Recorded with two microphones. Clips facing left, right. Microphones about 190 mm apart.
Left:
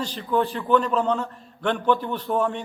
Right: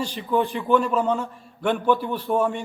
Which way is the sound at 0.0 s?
10° right (ahead or behind).